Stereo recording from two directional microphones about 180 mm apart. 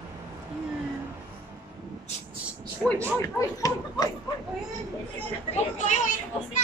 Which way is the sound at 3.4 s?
15° left (ahead or behind).